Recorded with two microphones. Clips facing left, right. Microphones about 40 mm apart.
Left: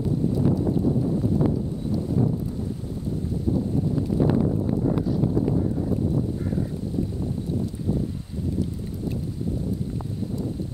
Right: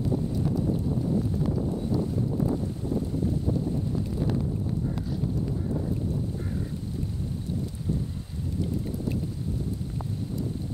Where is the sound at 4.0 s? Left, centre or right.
Centre.